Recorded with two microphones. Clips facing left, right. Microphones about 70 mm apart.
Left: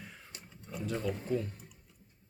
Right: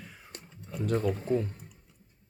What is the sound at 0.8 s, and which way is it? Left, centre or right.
Speech, right.